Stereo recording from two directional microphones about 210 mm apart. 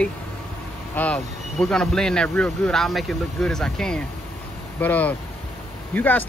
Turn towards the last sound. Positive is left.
turn(degrees=10)  # may be behind; listen again after turning